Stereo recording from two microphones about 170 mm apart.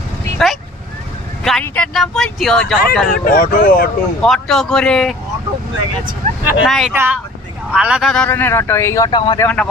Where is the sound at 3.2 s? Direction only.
55° left (ahead or behind).